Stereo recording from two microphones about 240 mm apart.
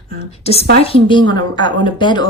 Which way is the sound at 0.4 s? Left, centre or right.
Left.